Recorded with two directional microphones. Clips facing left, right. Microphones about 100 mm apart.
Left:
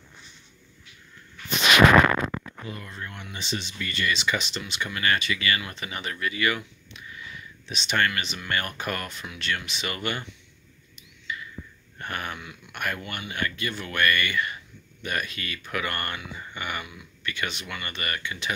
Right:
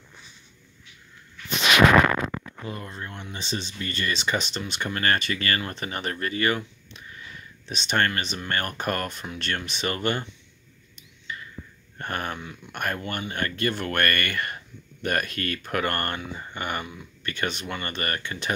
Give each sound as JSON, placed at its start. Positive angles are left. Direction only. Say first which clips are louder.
{"t": 2.7, "sound": "speech", "louder": "right 2 dB", "side_deg": -30}
{"t": 11.0, "sound": "a sound", "louder": "left 2 dB", "side_deg": -40}
{"t": 12.0, "sound": "speech", "louder": "right 3 dB", "side_deg": -40}